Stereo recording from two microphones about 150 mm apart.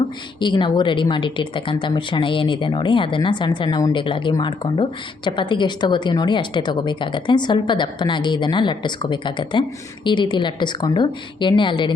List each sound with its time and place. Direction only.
0.3 s a woman's voice: 30° left (ahead or behind)